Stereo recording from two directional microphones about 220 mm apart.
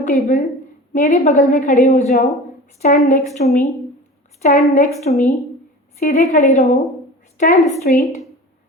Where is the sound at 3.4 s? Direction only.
40° left (ahead or behind).